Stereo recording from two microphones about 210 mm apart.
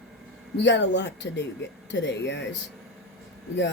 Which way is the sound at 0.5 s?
55° left (ahead or behind).